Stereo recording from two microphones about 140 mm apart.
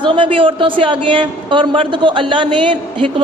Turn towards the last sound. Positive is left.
turn(degrees=-40)  # may be behind; listen again after turning